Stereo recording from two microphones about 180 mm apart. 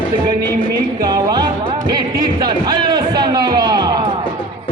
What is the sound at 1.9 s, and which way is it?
A man's voice, 25° right (ahead or behind).